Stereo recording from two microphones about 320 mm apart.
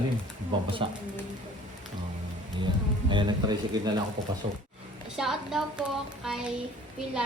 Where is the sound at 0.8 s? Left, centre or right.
Centre.